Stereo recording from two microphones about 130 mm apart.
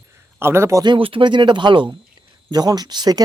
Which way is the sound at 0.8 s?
40° right (ahead or behind).